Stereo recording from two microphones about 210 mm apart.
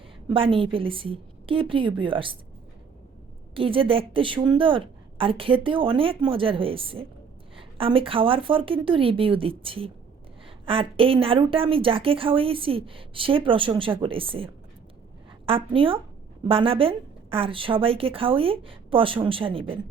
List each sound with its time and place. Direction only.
0.3 s a woman's voice: 25° right (ahead or behind)
3.5 s a woman's voice: 25° right (ahead or behind)